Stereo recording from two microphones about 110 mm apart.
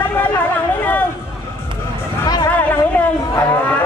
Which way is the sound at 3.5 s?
15° left (ahead or behind).